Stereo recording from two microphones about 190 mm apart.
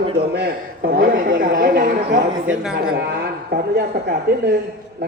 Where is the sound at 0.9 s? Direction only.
50° right (ahead or behind).